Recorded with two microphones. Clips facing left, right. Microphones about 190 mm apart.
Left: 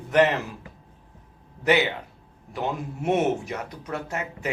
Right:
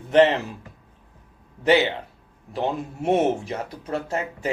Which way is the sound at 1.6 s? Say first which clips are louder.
Right 3 dB; 30° right (ahead or behind).